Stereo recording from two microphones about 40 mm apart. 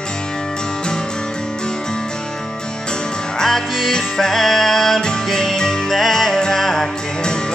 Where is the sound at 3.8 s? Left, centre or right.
Centre.